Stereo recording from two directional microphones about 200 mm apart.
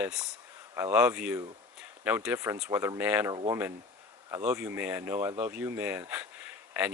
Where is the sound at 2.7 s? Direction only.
15° right (ahead or behind).